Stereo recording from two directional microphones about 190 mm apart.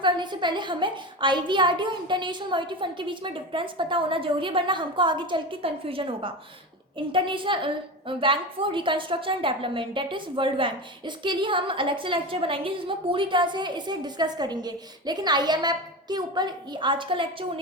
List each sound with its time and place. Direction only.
0.0 s a woman's voice: 25° right (ahead or behind)